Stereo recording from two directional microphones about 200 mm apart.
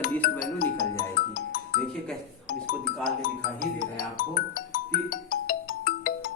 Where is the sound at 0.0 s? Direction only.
45° left (ahead or behind).